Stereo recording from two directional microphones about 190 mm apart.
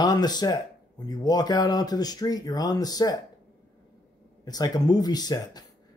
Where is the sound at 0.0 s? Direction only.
20° left (ahead or behind).